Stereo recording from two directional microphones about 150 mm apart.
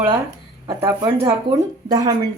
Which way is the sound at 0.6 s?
20° right (ahead or behind).